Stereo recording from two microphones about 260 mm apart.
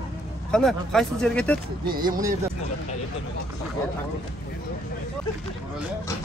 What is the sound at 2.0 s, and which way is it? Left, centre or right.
Speech, centre.